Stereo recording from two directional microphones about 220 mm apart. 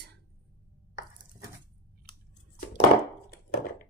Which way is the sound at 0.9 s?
15° right (ahead or behind).